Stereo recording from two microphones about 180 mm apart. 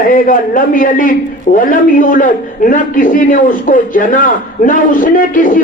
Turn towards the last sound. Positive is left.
turn(degrees=50)  # may be behind; listen again after turning